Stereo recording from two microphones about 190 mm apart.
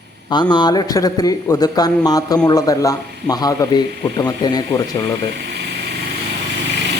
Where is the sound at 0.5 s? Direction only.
20° left (ahead or behind).